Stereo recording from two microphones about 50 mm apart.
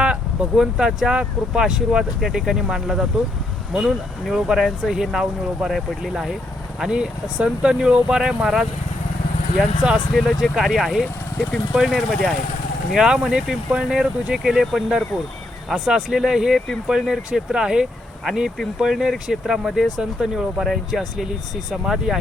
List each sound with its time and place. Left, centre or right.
0.0 s a sound: centre
0.6 s speech: centre
6.7 s speech: centre
9.8 s speech: centre
10.2 s speech: centre
12.9 s speech: centre
15.9 s speech: centre
20.0 s speech: centre
20.6 s speech: centre